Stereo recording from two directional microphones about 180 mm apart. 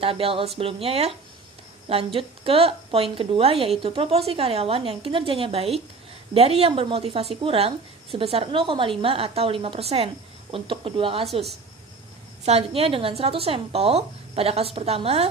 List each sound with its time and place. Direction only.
0.0 s a woman's voice: 30° right (ahead or behind)
2.1 s a woman's voice: 30° right (ahead or behind)
12.4 s a woman's voice: 35° right (ahead or behind)